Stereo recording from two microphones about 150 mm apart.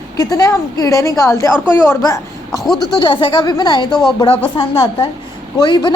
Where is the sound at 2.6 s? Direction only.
Centre (ahead or behind).